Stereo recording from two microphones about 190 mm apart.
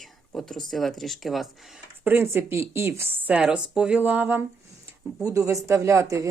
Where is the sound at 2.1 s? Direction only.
10° right (ahead or behind).